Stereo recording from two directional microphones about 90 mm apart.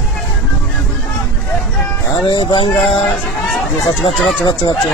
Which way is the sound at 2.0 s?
45° left (ahead or behind).